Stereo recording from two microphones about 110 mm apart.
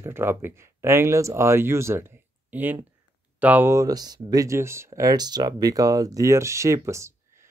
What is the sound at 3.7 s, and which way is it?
Speech, 35° right (ahead or behind).